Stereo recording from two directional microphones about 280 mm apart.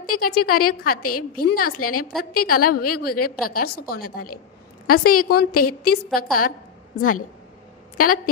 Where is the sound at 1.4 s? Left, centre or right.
Left.